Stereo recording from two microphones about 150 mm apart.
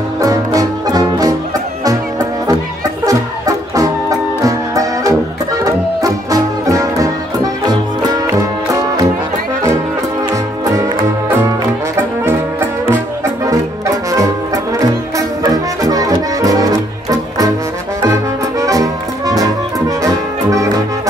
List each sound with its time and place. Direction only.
0.2 s music: 25° right (ahead or behind)
3.1 s music: 25° right (ahead or behind)
8.7 s music: 25° right (ahead or behind)
10.3 s music: 20° right (ahead or behind)
14.1 s music: 20° right (ahead or behind)
18.0 s music: 20° right (ahead or behind)
20.0 s brass instrument: 20° right (ahead or behind)